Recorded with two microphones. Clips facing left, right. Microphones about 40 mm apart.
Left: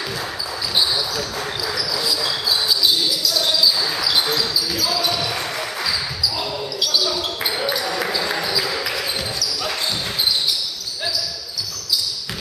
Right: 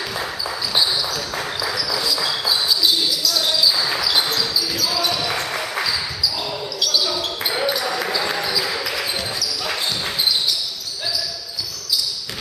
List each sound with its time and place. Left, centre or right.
1.7 s basketball bounce: centre
5.3 s basketball bounce: centre
6.8 s basketball bounce: centre